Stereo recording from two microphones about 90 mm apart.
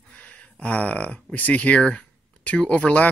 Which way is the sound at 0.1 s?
15° left (ahead or behind).